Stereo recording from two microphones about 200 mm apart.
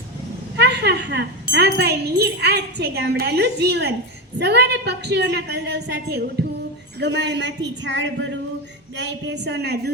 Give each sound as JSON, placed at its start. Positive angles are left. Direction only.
{"t": 0.5, "sound": "speech", "side_deg": -60}